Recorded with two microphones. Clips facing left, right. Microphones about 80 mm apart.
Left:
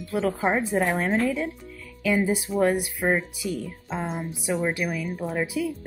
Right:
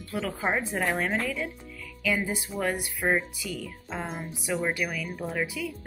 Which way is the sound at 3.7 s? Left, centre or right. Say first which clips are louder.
Left 4 dB; centre.